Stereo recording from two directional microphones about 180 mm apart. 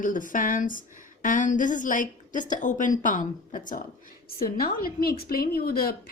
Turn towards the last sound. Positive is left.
turn(degrees=55)  # may be behind; listen again after turning